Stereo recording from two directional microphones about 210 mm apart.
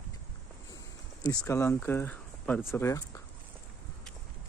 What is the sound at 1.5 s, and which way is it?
Speech, 10° left (ahead or behind).